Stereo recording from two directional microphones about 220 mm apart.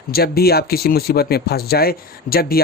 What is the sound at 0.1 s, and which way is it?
Speech, 45° left (ahead or behind).